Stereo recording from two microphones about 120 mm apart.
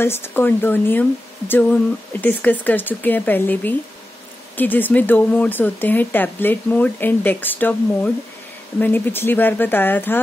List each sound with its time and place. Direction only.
0.0 s speech: 20° left (ahead or behind)